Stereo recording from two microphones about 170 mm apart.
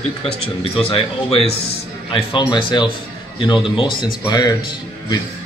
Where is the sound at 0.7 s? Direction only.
35° left (ahead or behind).